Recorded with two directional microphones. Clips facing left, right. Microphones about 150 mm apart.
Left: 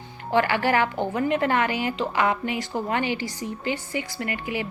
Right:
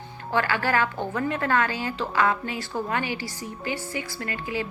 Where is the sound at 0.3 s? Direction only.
20° left (ahead or behind).